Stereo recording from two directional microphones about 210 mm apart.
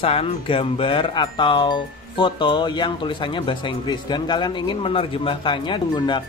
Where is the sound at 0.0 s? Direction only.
25° left (ahead or behind).